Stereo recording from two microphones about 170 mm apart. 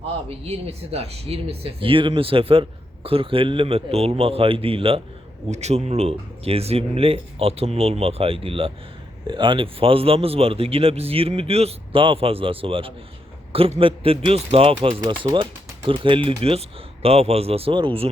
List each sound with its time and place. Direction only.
0.3 s speech: 35° right (ahead or behind)